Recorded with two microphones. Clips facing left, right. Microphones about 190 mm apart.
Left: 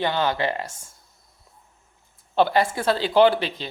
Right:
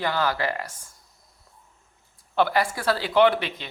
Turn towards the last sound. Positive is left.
turn(degrees=30)  # may be behind; listen again after turning